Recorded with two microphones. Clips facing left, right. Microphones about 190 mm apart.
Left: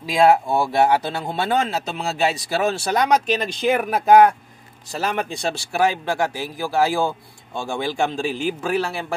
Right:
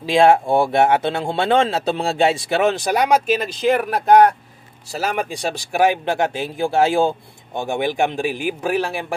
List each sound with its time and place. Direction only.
0.0 s speech: 30° right (ahead or behind); by 4.3 s 5° left (ahead or behind)
4.9 s a man's voice: 10° right (ahead or behind)